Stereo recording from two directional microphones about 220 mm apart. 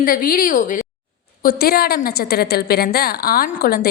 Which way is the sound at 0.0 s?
40° left (ahead or behind).